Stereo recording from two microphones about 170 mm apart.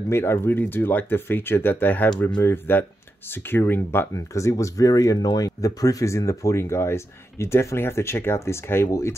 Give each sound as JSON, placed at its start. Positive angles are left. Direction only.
{"t": 0.1, "sound": "speech", "side_deg": 15}